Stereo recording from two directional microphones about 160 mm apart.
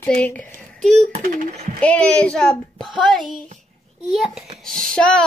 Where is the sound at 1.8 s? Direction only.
10° left (ahead or behind).